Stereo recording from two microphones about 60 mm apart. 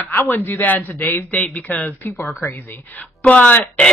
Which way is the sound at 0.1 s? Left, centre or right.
Left.